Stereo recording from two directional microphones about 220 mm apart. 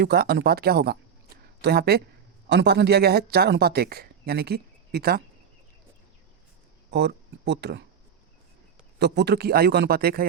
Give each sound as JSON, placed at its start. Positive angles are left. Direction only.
{"t": 0.0, "sound": "speech", "side_deg": -45}
{"t": 6.9, "sound": "speech", "side_deg": -50}
{"t": 9.0, "sound": "speech", "side_deg": -50}